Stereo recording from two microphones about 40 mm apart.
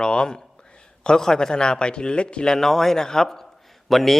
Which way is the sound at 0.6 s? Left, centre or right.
Left.